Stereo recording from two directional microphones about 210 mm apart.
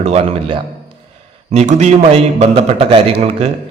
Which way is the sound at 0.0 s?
30° right (ahead or behind).